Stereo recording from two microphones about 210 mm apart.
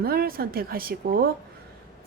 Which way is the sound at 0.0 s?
45° right (ahead or behind).